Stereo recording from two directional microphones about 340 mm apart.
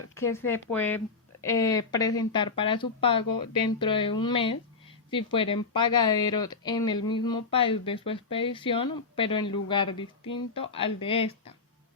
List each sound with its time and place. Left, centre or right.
0.1 s speech: centre